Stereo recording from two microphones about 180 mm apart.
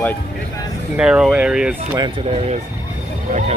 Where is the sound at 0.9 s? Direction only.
5° right (ahead or behind).